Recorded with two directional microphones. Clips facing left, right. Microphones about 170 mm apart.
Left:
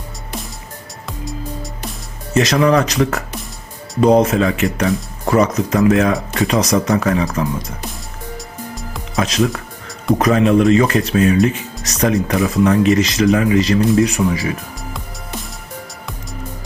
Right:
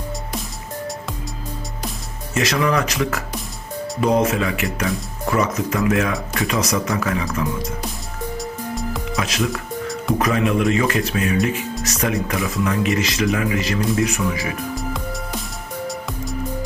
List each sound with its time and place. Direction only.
2.3 s speech: 40° left (ahead or behind)
10.2 s speech: 40° left (ahead or behind)